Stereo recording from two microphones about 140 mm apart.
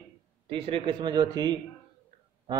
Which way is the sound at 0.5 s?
40° right (ahead or behind).